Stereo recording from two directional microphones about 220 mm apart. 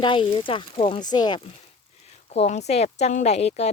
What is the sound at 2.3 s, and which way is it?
Speech, 30° left (ahead or behind).